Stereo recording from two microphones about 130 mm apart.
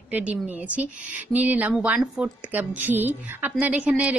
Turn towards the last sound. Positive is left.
turn(degrees=-10)  # may be behind; listen again after turning